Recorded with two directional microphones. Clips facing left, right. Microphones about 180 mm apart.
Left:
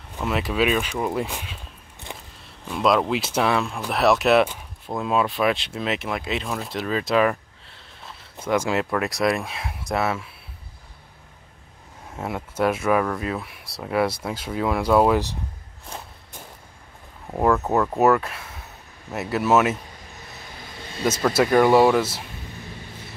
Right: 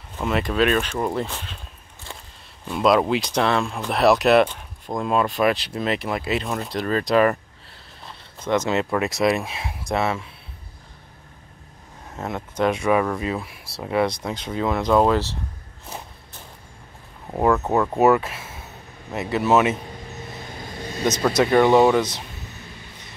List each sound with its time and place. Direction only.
0.2 s speech: centre (ahead or behind)
2.1 s a sound: 20° left (ahead or behind)
2.7 s speech: 5° right (ahead or behind)
8.0 s a sound: centre (ahead or behind)
8.9 s speech: centre (ahead or behind)
12.1 s speech: 10° left (ahead or behind)
17.3 s speech: 5° right (ahead or behind)
21.0 s speech: 5° left (ahead or behind)